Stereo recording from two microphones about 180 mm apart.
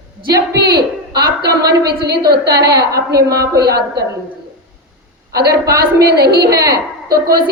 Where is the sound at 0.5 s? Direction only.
65° right (ahead or behind).